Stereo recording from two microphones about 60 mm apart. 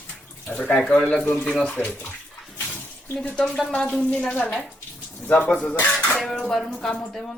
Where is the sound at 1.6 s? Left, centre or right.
Left.